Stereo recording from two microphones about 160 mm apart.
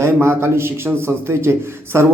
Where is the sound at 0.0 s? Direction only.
15° right (ahead or behind).